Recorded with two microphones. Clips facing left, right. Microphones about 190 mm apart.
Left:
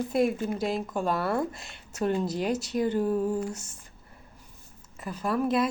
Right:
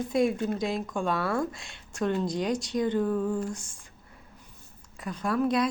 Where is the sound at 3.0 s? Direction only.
20° left (ahead or behind).